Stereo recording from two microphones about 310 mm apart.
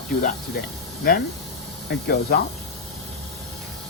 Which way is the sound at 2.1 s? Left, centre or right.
Left.